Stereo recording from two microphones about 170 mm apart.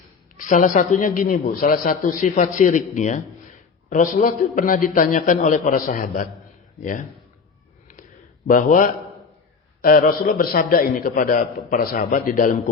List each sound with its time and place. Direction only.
0.3 s a man's voice: 50° left (ahead or behind)
4.2 s a man's voice: 50° left (ahead or behind)
8.4 s a man's voice: 50° left (ahead or behind)